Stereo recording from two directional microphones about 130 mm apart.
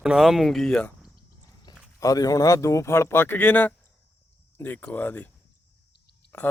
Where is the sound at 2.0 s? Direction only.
25° left (ahead or behind).